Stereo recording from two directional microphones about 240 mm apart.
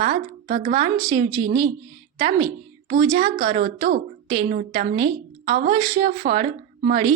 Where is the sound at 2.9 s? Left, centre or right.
Right.